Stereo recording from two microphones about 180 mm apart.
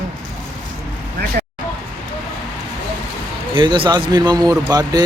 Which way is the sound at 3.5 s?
25° right (ahead or behind).